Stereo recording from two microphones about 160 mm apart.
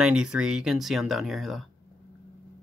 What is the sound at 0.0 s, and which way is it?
Speech, 5° right (ahead or behind).